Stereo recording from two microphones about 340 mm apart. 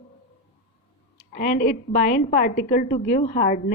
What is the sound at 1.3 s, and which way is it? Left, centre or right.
A woman's voice, left.